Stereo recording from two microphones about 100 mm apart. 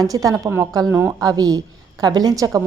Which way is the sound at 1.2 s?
40° right (ahead or behind).